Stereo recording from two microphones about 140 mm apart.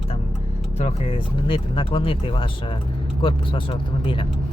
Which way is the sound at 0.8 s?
45° left (ahead or behind).